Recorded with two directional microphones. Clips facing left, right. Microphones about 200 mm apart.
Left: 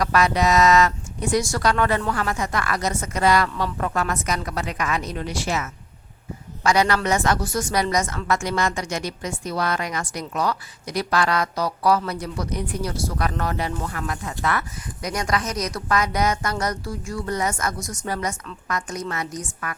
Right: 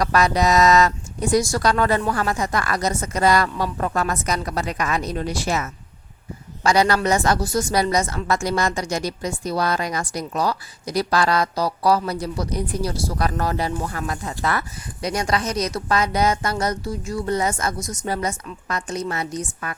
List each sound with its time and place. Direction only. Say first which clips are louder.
0.0 s a woman's voice: right 1 dB; 40° right (ahead or behind)